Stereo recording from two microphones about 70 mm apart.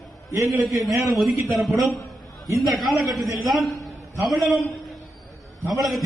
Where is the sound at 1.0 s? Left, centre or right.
Centre.